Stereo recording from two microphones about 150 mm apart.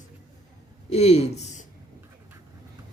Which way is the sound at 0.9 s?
45° left (ahead or behind).